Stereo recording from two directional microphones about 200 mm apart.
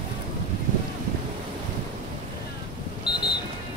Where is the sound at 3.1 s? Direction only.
20° left (ahead or behind).